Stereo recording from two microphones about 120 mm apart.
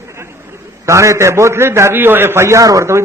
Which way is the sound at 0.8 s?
25° right (ahead or behind).